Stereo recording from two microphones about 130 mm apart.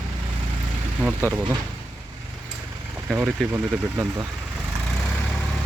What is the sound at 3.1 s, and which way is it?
Speech, 15° right (ahead or behind).